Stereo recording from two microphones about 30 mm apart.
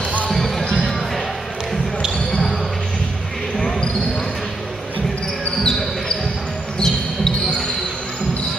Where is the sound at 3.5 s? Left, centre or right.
Centre.